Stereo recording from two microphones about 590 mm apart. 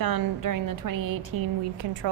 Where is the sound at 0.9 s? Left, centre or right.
Right.